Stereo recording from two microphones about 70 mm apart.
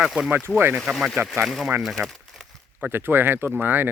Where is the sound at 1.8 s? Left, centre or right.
Centre.